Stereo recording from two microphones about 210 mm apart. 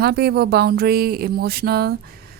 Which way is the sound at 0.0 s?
50° right (ahead or behind).